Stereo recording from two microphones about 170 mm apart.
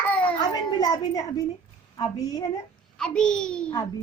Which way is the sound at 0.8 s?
25° left (ahead or behind).